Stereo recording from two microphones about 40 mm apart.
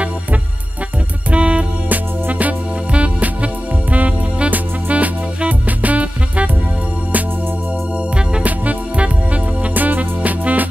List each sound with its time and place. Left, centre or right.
1.3 s music: right
1.9 s music: right
8.4 s music: right